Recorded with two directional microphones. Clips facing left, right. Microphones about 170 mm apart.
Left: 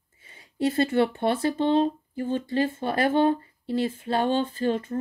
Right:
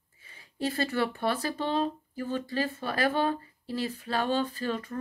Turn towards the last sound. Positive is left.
turn(degrees=25)  # may be behind; listen again after turning